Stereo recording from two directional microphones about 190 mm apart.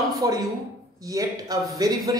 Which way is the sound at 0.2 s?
20° right (ahead or behind).